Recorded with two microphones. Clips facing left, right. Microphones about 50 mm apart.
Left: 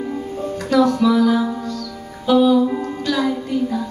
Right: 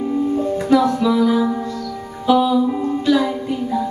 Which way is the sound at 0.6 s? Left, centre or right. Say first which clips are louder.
Left 1 dB; centre.